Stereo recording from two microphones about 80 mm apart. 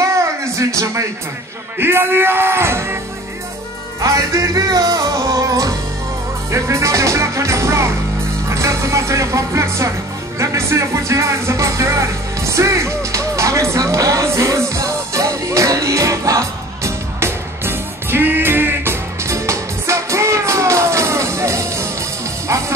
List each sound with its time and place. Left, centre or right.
0.0 s a sound: right
1.8 s speech: right
4.0 s music: right
8.5 s speech: right
10.4 s music: right
12.4 s speech: right
17.2 s music: right